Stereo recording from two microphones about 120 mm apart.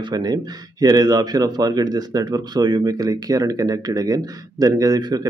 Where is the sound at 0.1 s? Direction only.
35° right (ahead or behind).